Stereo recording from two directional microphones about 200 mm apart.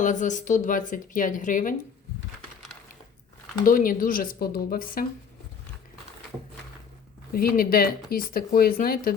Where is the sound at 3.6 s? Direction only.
45° left (ahead or behind).